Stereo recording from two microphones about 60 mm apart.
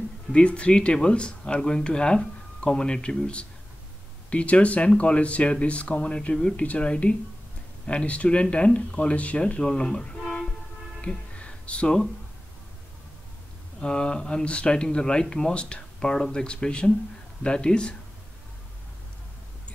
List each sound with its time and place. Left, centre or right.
0.3 s speech: centre
11.0 s music: centre
13.7 s speech: centre